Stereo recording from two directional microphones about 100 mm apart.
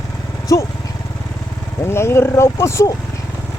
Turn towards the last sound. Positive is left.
turn(degrees=30)  # may be behind; listen again after turning